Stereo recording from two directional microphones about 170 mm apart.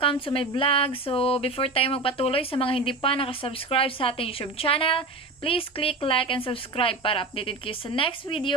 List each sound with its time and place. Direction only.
0.0 s speech: 30° left (ahead or behind)